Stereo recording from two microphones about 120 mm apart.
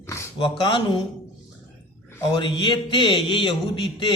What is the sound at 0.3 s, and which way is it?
Speech, 45° left (ahead or behind).